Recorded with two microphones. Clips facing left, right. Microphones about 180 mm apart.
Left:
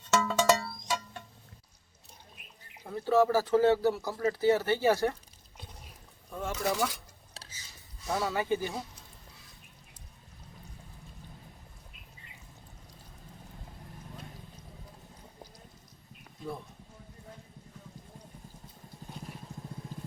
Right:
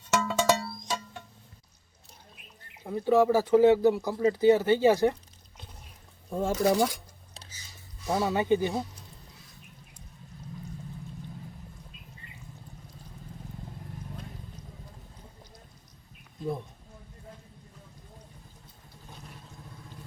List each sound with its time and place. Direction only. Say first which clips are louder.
0.2 s music: even; 10° right (ahead or behind)
2.8 s speech: right 3 dB; 15° right (ahead or behind)
6.3 s speech: right 7 dB; 30° right (ahead or behind)
8.0 s speech: right 4 dB; 20° right (ahead or behind)